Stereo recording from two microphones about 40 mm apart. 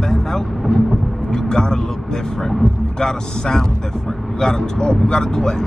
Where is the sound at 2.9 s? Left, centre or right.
Centre.